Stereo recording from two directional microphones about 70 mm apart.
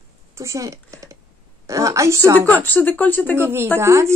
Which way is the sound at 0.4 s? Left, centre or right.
Right.